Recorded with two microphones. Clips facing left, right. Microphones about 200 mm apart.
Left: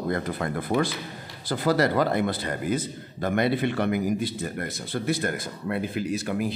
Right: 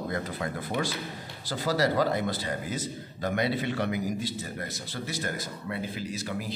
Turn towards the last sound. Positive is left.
turn(degrees=55)  # may be behind; listen again after turning